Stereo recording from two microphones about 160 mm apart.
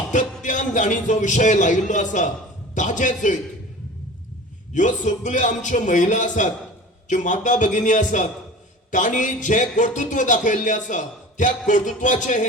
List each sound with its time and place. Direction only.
0.1 s a man's voice: 50° left (ahead or behind)
4.7 s a man's voice: 50° left (ahead or behind)